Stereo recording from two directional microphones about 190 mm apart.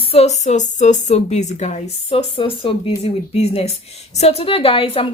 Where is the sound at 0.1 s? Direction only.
35° left (ahead or behind).